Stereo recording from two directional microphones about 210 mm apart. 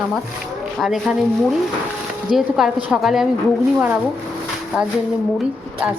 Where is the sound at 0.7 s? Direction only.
Centre (ahead or behind).